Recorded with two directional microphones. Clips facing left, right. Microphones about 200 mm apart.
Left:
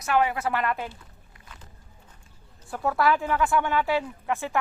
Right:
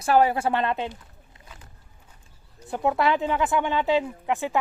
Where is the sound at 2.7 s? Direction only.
20° right (ahead or behind).